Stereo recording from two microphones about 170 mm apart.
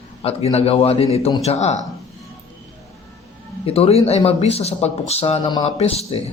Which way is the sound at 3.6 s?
35° left (ahead or behind).